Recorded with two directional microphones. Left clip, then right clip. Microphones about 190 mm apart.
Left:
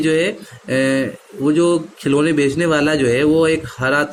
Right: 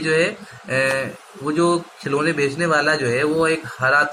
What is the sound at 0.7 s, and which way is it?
Speech, 60° left (ahead or behind).